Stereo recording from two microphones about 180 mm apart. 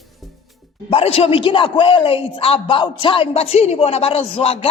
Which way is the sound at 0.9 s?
35° left (ahead or behind).